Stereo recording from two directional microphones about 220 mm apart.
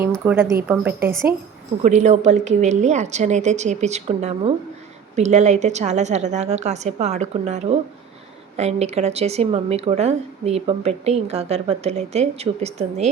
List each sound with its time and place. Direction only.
0.1 s a woman's voice: 10° right (ahead or behind)
1.8 s a woman's voice: 35° right (ahead or behind)